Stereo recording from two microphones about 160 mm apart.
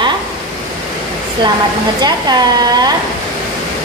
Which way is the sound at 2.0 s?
25° right (ahead or behind).